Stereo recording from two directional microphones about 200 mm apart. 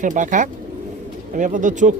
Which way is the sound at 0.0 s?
40° right (ahead or behind).